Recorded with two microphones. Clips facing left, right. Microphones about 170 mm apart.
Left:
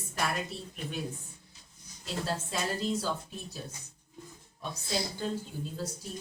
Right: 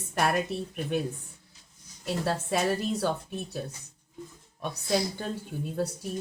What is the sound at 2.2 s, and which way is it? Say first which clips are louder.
Speech: right 7 dB; 60° right (ahead or behind).